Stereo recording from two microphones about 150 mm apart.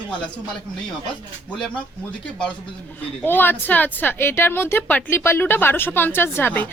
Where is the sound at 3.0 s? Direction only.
15° left (ahead or behind).